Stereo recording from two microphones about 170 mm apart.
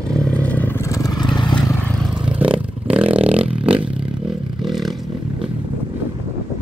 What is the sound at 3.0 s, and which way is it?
Vehicle, 30° right (ahead or behind).